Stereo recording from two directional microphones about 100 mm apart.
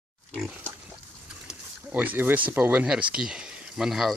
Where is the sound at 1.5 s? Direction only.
15° right (ahead or behind).